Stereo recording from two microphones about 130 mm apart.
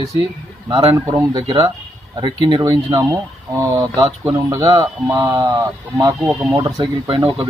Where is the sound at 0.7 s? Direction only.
20° right (ahead or behind).